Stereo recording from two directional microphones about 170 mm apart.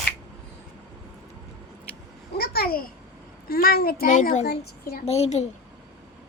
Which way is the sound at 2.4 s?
65° left (ahead or behind).